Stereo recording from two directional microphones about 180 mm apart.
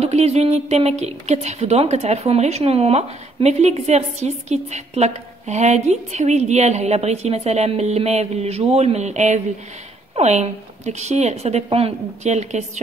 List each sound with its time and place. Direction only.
0.0 s a woman's voice: 35° right (ahead or behind)